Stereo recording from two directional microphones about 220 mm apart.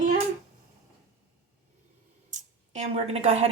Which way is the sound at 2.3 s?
30° right (ahead or behind).